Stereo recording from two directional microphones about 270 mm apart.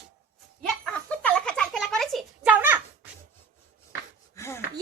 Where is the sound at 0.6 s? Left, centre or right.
Centre.